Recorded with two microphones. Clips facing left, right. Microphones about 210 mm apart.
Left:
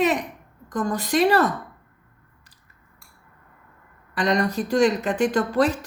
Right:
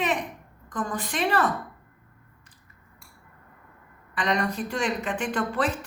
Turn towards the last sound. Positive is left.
turn(degrees=40)  # may be behind; listen again after turning